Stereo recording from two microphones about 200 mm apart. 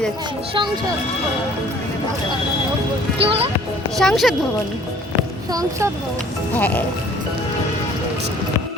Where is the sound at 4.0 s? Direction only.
Centre (ahead or behind).